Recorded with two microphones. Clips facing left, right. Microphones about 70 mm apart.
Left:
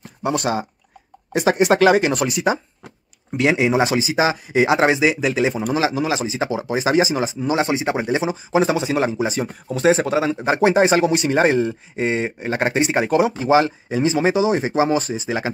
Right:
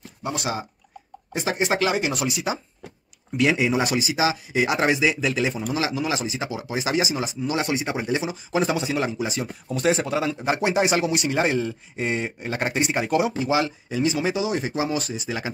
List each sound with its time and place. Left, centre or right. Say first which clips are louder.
0.2 s speech: left 7 dB; left
1.3 s speech: left 8 dB; left
3.4 s speech: left 5 dB; left
4.2 s speech: left 5 dB; left
4.6 s speech: left 4 dB; left